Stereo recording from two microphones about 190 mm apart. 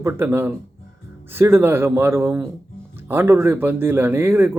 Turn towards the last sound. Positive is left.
turn(degrees=-10)  # may be behind; listen again after turning